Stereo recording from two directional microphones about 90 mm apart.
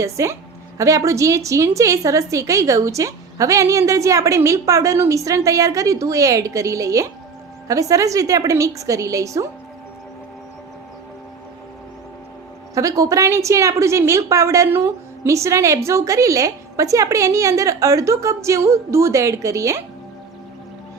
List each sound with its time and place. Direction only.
0.0 s a woman's voice: 35° right (ahead or behind)
12.7 s a woman's voice: 40° right (ahead or behind)